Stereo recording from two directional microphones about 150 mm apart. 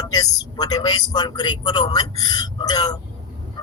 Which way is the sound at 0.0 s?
25° left (ahead or behind).